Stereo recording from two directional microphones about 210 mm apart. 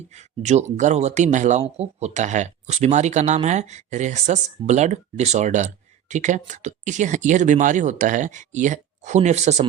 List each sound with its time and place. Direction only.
0.1 s speech: 35° right (ahead or behind)